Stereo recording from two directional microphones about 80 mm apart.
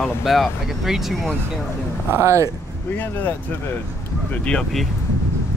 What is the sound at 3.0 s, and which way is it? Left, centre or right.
Speech, left.